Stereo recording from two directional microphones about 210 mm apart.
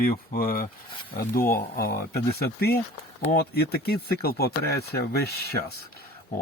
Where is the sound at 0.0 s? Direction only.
45° left (ahead or behind).